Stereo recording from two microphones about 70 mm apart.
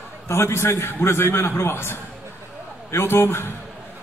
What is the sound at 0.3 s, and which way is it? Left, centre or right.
A man's voice, left.